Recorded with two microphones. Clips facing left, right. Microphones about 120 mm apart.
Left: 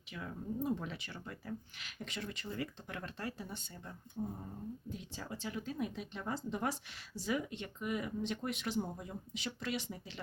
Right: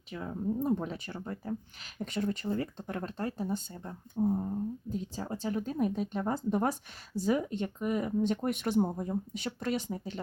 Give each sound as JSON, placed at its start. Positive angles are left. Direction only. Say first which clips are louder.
{"t": 0.1, "sound": "speech", "louder": "right 8 dB", "side_deg": -35}